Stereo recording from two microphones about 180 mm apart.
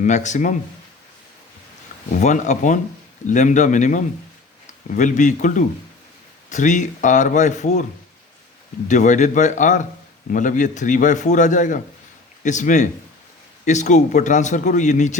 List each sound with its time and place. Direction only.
0.0 s speech: 40° left (ahead or behind)
2.1 s speech: 45° left (ahead or behind)
8.9 s speech: 45° left (ahead or behind)